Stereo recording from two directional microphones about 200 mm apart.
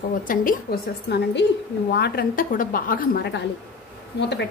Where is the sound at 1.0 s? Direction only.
60° left (ahead or behind).